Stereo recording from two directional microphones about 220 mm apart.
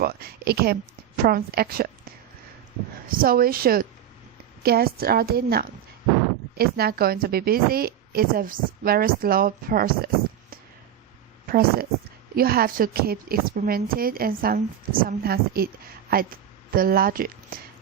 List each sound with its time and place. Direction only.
0.0 s a sound: 45° right (ahead or behind)
1.2 s a woman's voice: 45° right (ahead or behind)
3.2 s a woman's voice: 40° right (ahead or behind)
11.4 s a woman's voice: 45° right (ahead or behind)